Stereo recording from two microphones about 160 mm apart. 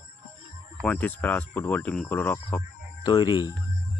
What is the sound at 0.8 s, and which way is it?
Speech, 10° left (ahead or behind).